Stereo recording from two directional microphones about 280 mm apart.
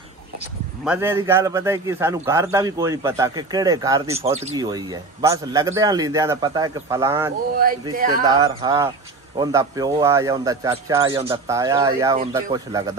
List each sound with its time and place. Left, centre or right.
0.8 s a man's voice: centre
7.9 s speech: right
8.3 s a man's voice: centre